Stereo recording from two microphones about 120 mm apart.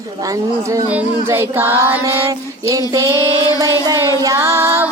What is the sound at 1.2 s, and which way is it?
Child singing, 15° right (ahead or behind).